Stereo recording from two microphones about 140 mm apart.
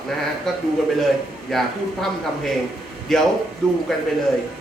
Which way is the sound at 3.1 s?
5° left (ahead or behind).